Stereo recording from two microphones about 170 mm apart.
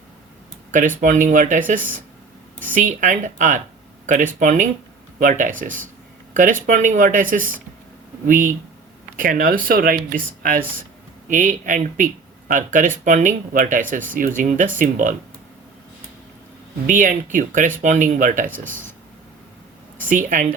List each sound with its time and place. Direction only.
0.7 s speech: 50° right (ahead or behind)
16.8 s speech: 50° right (ahead or behind)
20.1 s speech: 50° right (ahead or behind)